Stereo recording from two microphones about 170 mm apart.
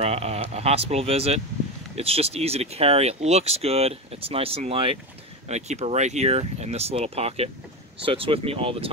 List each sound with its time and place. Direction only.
0.0 s speech: 40° right (ahead or behind)